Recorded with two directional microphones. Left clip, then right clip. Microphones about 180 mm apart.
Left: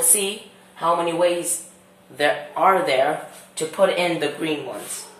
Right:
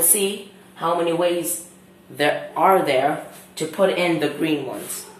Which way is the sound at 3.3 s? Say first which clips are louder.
Even; centre (ahead or behind).